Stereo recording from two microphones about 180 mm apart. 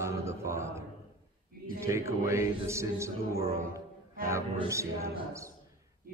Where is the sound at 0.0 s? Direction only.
15° right (ahead or behind).